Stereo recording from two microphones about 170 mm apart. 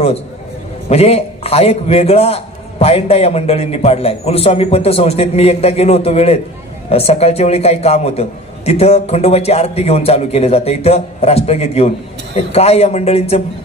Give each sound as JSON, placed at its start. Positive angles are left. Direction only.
{"t": 0.8, "sound": "a man's voice", "side_deg": 40}